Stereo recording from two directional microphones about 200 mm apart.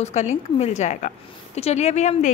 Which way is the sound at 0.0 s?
35° left (ahead or behind).